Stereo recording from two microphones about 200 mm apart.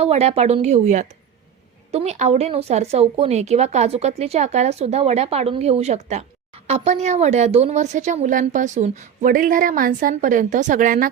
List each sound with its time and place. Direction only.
0.0 s a woman's voice: 30° right (ahead or behind)